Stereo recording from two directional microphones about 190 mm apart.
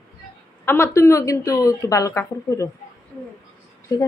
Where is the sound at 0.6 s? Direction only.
10° left (ahead or behind).